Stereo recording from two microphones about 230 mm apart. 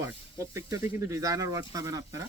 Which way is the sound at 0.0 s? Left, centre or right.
Centre.